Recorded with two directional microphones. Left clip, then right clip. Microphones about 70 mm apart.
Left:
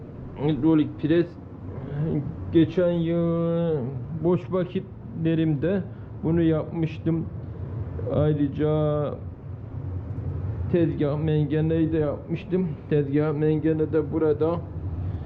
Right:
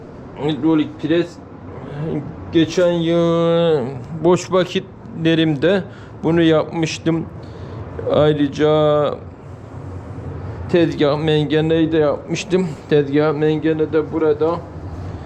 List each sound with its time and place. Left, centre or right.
0.6 s a man's voice: centre
3.0 s speech: right
10.7 s speech: right
13.6 s a man's voice: centre
14.2 s speech: centre